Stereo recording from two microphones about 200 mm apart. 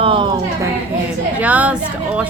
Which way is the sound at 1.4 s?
5° right (ahead or behind).